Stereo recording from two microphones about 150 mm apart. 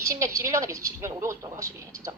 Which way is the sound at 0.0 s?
20° right (ahead or behind).